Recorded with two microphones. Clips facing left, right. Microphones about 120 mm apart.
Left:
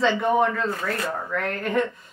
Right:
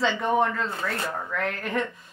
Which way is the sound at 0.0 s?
Centre (ahead or behind).